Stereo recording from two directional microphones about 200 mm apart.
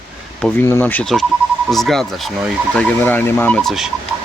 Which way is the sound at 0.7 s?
10° left (ahead or behind).